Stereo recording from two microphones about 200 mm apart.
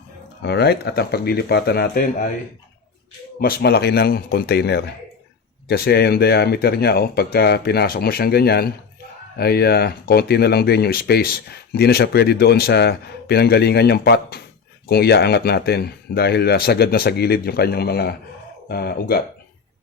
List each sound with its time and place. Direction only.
0.4 s speech: 55° left (ahead or behind)
3.4 s speech: 50° left (ahead or behind)